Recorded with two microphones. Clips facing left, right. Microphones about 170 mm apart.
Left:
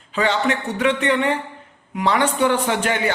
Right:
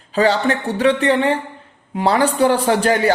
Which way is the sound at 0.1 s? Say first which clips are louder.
Right 4 dB; 35° right (ahead or behind).